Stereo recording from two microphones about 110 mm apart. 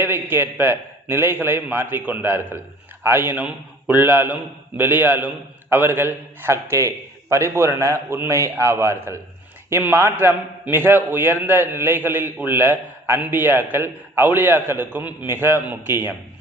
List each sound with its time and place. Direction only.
0.0 s a man's voice: 20° right (ahead or behind)